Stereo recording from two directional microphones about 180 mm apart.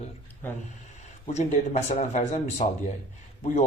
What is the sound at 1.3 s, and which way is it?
A man's voice, 40° left (ahead or behind).